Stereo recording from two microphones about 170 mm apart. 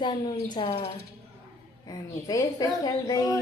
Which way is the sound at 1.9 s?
20° left (ahead or behind).